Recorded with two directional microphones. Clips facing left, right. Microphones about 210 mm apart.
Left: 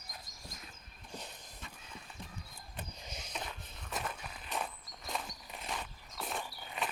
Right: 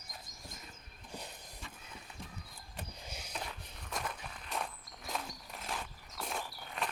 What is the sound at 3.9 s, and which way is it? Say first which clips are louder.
Walk: even; centre (ahead or behind).